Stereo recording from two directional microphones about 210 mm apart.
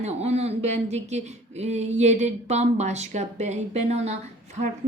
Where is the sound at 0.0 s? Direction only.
30° right (ahead or behind).